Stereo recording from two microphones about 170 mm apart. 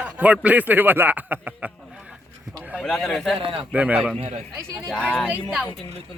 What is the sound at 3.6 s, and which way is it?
Speech, 5° right (ahead or behind).